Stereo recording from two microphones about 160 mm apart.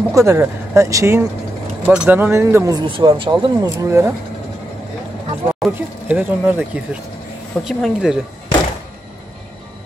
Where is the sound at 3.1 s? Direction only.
35° right (ahead or behind).